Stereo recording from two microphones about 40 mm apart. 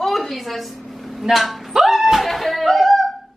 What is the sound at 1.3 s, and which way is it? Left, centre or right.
Speech, centre.